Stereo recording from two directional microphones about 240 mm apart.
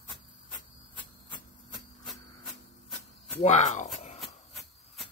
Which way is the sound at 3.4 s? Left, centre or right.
Left.